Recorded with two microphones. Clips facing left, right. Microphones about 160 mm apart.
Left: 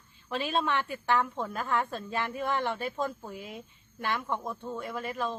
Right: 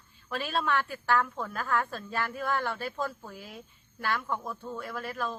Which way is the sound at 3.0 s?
15° left (ahead or behind).